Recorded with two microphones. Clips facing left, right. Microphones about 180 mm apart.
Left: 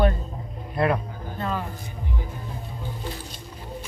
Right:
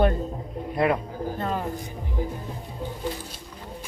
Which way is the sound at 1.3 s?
45° right (ahead or behind).